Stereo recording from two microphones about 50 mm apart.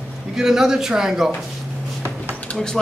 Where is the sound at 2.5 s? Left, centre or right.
Centre.